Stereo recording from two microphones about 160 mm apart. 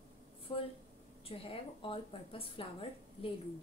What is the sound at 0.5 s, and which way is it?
A woman's voice, 35° left (ahead or behind).